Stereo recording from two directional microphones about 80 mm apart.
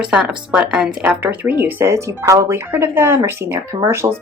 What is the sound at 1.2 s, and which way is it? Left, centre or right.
Speech, right.